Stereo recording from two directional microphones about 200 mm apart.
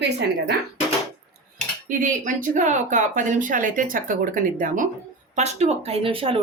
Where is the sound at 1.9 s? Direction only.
40° right (ahead or behind).